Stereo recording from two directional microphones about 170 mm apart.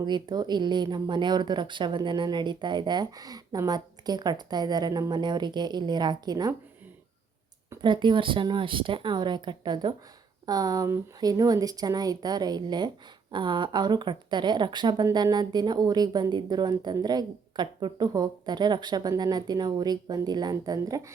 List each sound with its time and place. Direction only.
0.0 s speech: 25° right (ahead or behind)
7.8 s speech: 30° right (ahead or behind)